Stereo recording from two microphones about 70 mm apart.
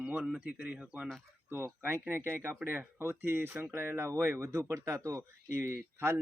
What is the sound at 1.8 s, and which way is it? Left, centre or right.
Speech, right.